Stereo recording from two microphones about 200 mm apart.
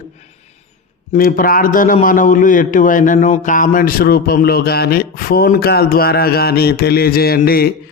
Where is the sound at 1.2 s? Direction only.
45° left (ahead or behind).